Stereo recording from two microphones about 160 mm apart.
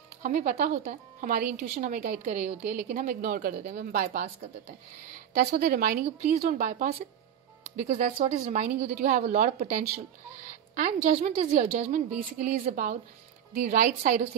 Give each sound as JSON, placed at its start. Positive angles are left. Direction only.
{"t": 0.2, "sound": "a woman's voice", "side_deg": -55}
{"t": 2.9, "sound": "a woman's voice", "side_deg": -60}
{"t": 5.6, "sound": "a woman's voice", "side_deg": -75}
{"t": 10.8, "sound": "a woman's voice", "side_deg": -50}